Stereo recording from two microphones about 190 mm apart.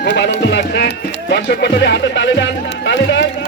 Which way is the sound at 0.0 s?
65° left (ahead or behind).